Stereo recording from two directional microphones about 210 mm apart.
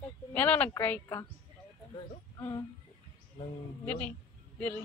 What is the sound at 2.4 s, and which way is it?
Speech, 20° left (ahead or behind).